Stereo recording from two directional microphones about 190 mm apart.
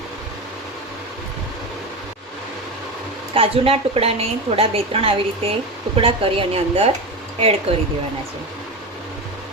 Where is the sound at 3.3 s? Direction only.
30° right (ahead or behind).